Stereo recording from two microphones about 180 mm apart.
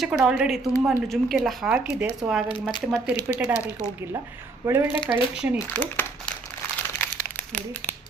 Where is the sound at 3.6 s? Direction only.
15° left (ahead or behind).